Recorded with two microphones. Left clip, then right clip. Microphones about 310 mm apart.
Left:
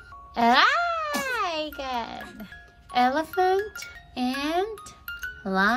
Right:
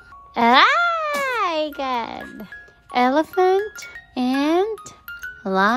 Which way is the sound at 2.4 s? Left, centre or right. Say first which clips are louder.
Right 6 dB; centre.